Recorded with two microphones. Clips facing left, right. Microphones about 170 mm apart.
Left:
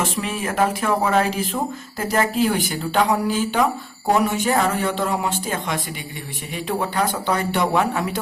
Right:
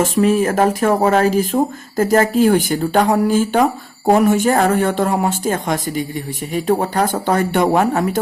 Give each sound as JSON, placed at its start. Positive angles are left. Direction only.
{"t": 0.0, "sound": "speech", "side_deg": -45}